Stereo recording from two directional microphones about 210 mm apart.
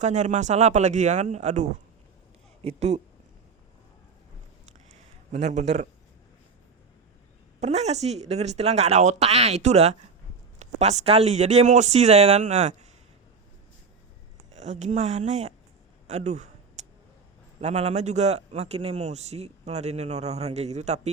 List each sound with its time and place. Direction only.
0.0 s a man's voice: 35° right (ahead or behind)
2.6 s a man's voice: 30° right (ahead or behind)
5.3 s a man's voice: 35° right (ahead or behind)
7.6 s a man's voice: 30° right (ahead or behind)
14.5 s a man's voice: 35° right (ahead or behind)
16.0 s a sound: 35° right (ahead or behind)
17.6 s a man's voice: 30° right (ahead or behind)